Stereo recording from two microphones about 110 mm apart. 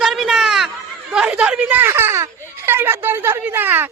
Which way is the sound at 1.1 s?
10° right (ahead or behind).